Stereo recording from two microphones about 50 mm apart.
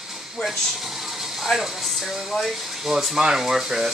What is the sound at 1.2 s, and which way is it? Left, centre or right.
Speech, centre.